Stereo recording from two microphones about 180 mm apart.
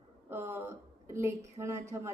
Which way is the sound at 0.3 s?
15° right (ahead or behind).